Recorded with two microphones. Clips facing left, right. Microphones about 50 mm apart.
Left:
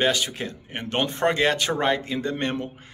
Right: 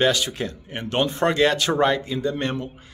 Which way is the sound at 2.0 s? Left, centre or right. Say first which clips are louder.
Right 2 dB; left.